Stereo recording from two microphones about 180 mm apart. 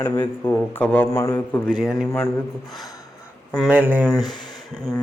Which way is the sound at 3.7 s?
10° right (ahead or behind).